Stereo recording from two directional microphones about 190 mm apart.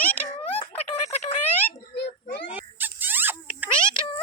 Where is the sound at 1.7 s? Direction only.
60° left (ahead or behind).